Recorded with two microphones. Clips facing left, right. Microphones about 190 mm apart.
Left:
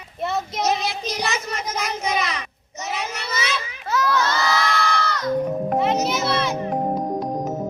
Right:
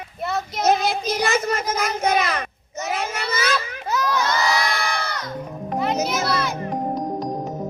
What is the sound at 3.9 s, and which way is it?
Crowd, 15° right (ahead or behind).